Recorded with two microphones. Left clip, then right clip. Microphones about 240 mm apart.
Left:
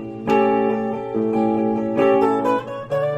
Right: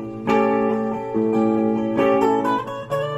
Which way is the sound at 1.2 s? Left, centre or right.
Right.